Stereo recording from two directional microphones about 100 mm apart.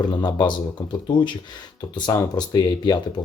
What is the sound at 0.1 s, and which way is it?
Speech, 45° left (ahead or behind).